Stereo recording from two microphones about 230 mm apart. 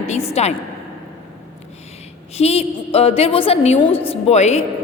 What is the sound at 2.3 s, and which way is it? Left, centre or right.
A woman's voice, left.